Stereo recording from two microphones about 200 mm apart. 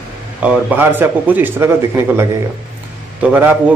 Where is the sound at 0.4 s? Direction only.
10° right (ahead or behind).